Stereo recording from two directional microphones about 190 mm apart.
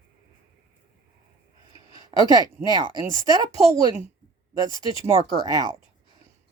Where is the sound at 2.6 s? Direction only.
20° left (ahead or behind).